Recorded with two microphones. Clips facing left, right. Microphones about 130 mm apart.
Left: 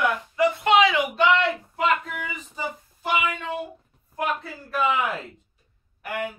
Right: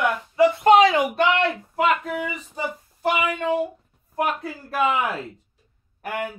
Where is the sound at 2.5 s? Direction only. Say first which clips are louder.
Right 3 dB; 50° right (ahead or behind).